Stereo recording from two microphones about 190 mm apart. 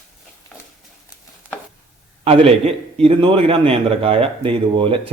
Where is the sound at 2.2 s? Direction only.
30° right (ahead or behind).